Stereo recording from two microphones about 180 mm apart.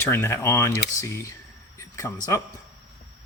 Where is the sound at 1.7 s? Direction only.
15° left (ahead or behind).